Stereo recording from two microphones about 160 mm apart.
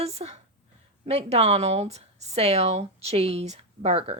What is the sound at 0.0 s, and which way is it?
Speech, 40° right (ahead or behind).